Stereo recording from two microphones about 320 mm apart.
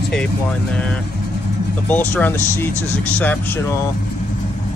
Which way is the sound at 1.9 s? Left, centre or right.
Centre.